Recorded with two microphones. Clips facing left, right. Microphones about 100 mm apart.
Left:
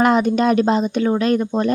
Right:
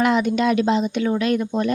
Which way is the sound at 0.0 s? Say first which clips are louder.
Left 3 dB; 40° left (ahead or behind).